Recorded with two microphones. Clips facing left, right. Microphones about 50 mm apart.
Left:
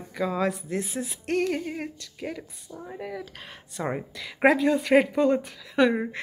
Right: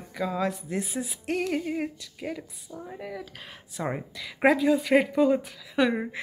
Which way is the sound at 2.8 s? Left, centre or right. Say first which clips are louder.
Left 2 dB; centre.